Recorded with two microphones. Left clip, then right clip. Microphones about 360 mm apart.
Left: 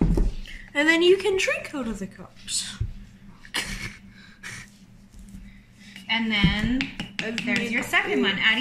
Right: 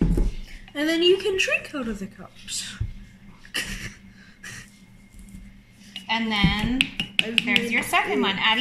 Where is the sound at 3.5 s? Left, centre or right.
Left.